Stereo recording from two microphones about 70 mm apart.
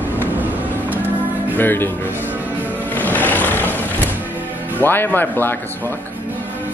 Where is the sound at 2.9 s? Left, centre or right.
Left.